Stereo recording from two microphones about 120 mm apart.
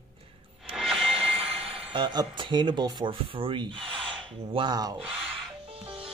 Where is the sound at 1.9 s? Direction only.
40° right (ahead or behind).